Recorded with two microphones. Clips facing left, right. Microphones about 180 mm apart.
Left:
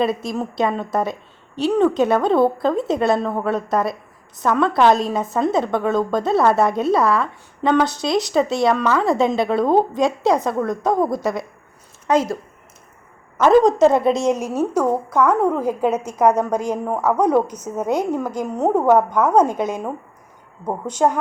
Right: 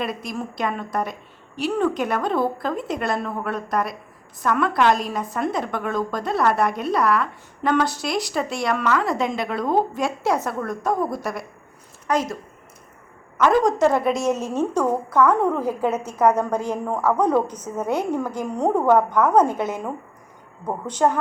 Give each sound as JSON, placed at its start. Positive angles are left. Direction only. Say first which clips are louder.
{"t": 0.0, "sound": "a woman's voice", "louder": "left 7 dB", "side_deg": 25}